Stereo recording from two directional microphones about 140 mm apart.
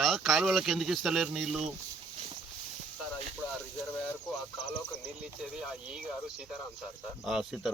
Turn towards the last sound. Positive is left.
turn(degrees=-5)  # may be behind; listen again after turning